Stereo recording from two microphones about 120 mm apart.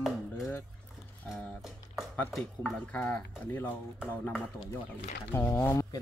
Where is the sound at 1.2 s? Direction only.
15° left (ahead or behind).